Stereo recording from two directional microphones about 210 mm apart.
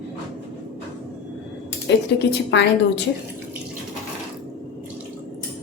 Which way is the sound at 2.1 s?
55° left (ahead or behind).